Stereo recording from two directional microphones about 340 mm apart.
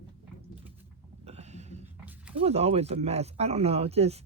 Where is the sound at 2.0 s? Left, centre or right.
Centre.